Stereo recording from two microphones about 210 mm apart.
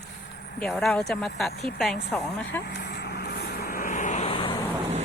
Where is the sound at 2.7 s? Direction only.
50° left (ahead or behind); by 4.6 s 25° left (ahead or behind).